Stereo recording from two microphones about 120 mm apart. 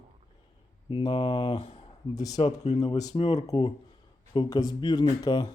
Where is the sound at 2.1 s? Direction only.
30° left (ahead or behind).